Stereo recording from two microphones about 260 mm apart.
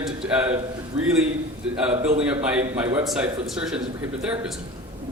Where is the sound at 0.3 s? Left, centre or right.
Centre.